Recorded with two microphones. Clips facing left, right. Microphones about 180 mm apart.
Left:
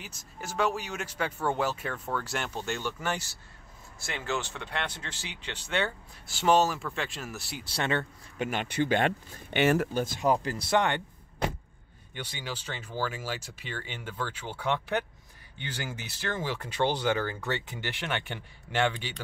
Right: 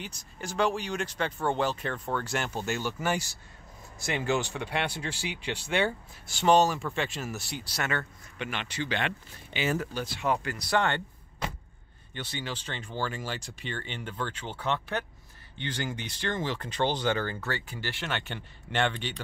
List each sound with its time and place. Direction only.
0.0 s speech: 5° left (ahead or behind)
6.2 s speech: 5° left (ahead or behind)
7.6 s speech: 30° left (ahead or behind)
8.4 s speech: 45° left (ahead or behind)
9.6 s speech: 65° left (ahead or behind)
9.9 s speech: 45° left (ahead or behind); by 11.0 s 20° left (ahead or behind)
12.1 s speech: 10° left (ahead or behind)
17.5 s speech: 20° left (ahead or behind)